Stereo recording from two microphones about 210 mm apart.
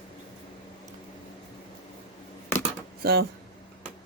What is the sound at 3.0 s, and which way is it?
Speech, 45° right (ahead or behind).